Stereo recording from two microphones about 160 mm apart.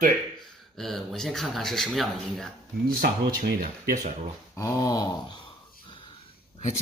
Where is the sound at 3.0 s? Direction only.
75° right (ahead or behind).